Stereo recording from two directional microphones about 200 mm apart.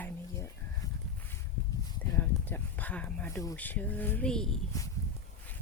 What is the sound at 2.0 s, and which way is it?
Speech, 10° left (ahead or behind).